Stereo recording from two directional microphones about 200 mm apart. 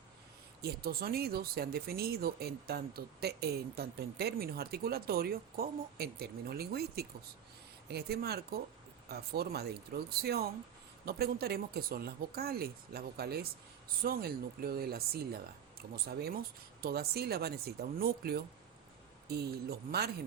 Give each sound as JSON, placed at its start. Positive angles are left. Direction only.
{"t": 0.6, "sound": "speech", "side_deg": -50}